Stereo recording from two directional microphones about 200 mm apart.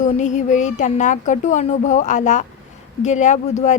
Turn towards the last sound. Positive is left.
turn(degrees=35)  # may be behind; listen again after turning